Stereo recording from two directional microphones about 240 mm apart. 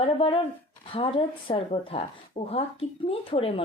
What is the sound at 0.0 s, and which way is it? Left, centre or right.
Speech, left.